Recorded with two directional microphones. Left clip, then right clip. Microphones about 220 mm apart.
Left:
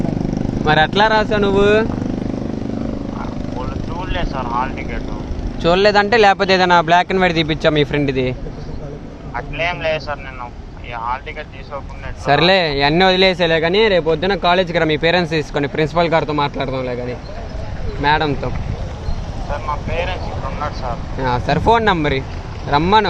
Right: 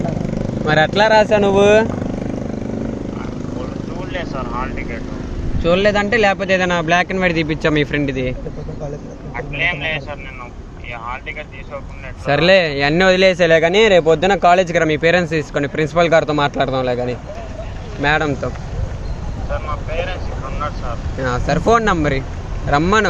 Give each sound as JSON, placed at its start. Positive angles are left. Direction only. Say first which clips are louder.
{"t": 0.6, "sound": "speech", "louder": "even", "side_deg": 10}
{"t": 4.1, "sound": "speech", "louder": "left 3 dB", "side_deg": 10}
{"t": 5.6, "sound": "speech", "louder": "left 2 dB", "side_deg": 20}
{"t": 12.2, "sound": "speech", "louder": "right 1 dB", "side_deg": 5}
{"t": 18.0, "sound": "speech", "louder": "left 1 dB", "side_deg": 0}
{"t": 19.9, "sound": "speech", "louder": "even", "side_deg": 10}
{"t": 21.2, "sound": "speech", "louder": "left 1 dB", "side_deg": 5}